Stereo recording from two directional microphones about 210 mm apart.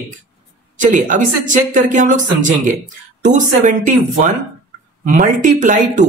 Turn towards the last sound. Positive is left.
turn(degrees=-40)  # may be behind; listen again after turning